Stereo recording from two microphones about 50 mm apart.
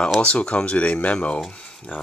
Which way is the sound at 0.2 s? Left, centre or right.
Left.